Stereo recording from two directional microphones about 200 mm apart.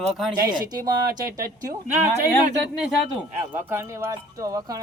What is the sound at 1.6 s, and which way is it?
Speech, 20° right (ahead or behind).